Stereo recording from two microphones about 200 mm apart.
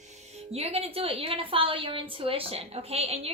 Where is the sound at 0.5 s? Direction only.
30° right (ahead or behind).